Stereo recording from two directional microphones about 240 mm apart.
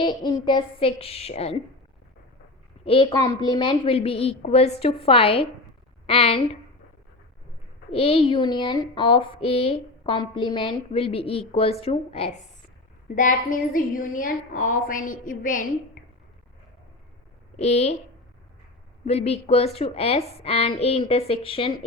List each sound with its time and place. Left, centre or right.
0.0 s speech: centre
2.8 s speech: left
7.9 s a woman's voice: left
17.6 s speech: left
19.0 s speech: left